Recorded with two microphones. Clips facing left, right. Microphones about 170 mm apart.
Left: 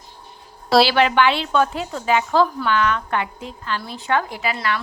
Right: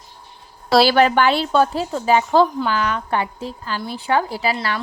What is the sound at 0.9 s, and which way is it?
Speech, 40° right (ahead or behind).